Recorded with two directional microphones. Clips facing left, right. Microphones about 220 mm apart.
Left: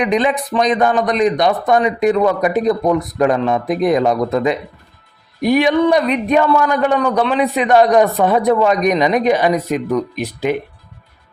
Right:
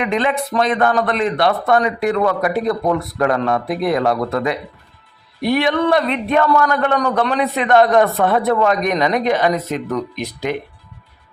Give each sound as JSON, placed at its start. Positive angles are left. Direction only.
{"t": 0.0, "sound": "a man's voice", "side_deg": 15}